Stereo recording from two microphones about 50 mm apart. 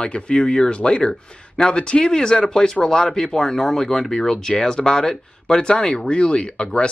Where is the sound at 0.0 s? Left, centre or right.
Centre.